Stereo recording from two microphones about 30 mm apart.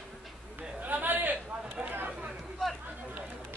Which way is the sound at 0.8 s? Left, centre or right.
Right.